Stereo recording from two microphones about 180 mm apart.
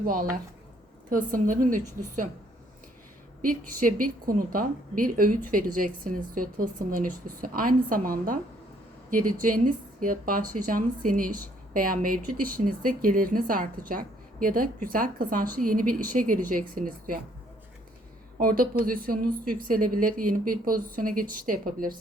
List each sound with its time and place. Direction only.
0.0 s speech: 50° right (ahead or behind)
3.4 s speech: 50° right (ahead or behind)
18.3 s speech: 50° right (ahead or behind)